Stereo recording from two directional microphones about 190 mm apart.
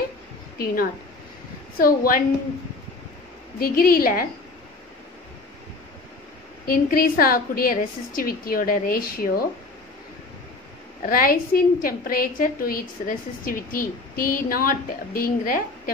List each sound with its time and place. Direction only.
1.8 s a woman's voice: 50° left (ahead or behind)
3.5 s a woman's voice: 50° left (ahead or behind)
6.6 s a woman's voice: 50° left (ahead or behind)
11.0 s a woman's voice: 50° left (ahead or behind)